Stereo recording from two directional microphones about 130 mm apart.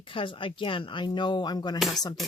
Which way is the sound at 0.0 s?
40° left (ahead or behind).